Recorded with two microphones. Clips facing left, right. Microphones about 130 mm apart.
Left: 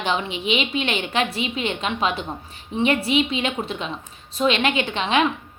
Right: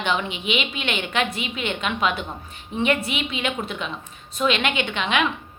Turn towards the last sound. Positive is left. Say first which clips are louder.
# left 2 dB
turn(degrees=35)  # may be behind; listen again after turning